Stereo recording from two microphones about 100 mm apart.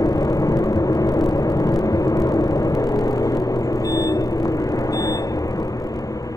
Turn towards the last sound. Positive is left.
turn(degrees=35)  # may be behind; listen again after turning